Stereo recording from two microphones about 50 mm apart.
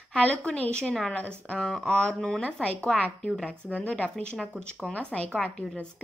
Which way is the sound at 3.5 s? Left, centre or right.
Left.